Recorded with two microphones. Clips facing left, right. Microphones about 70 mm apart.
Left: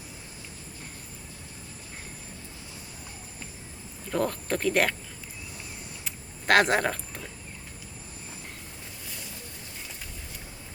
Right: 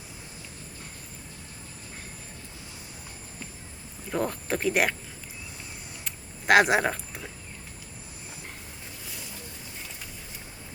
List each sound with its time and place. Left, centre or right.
4.1 s speech: centre
6.5 s speech: centre